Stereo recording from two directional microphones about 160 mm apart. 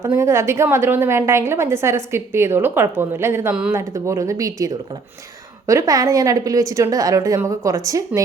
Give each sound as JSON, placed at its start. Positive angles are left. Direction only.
{"t": 0.0, "sound": "a woman's voice", "side_deg": -15}